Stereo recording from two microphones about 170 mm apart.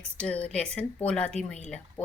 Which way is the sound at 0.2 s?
5° left (ahead or behind).